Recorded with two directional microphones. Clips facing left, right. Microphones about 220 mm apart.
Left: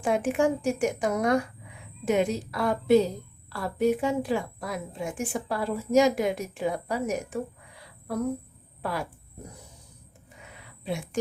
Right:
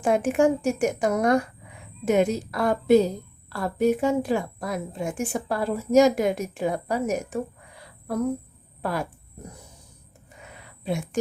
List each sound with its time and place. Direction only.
0.0 s a woman's voice: 45° right (ahead or behind)
8.8 s speech: 45° right (ahead or behind)
10.8 s a woman's voice: 45° right (ahead or behind)